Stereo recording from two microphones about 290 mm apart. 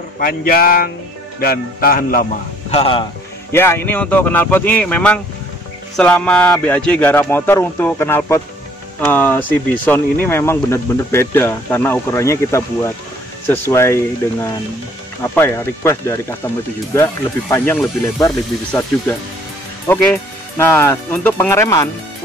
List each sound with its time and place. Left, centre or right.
0.2 s a man's voice: left
2.7 s speech: centre
3.5 s speech: centre
15.3 s speech: centre